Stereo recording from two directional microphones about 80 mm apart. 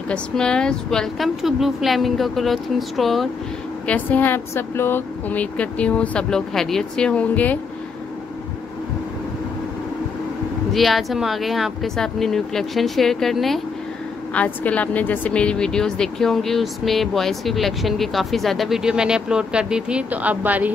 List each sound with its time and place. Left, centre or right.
0.1 s speech: centre
3.8 s a woman's voice: centre
10.7 s speech: centre
14.3 s speech: centre; by 20.7 s right